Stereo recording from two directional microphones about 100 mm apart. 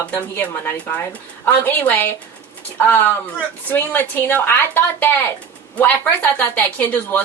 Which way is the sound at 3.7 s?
20° left (ahead or behind).